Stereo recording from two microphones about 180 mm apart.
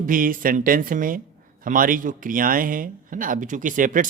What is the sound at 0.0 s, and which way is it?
A man's voice, 50° right (ahead or behind).